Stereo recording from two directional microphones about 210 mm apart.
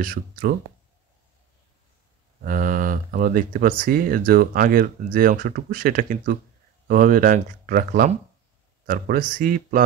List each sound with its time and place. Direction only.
0.0 s speech: 45° right (ahead or behind)
2.4 s speech: 40° right (ahead or behind)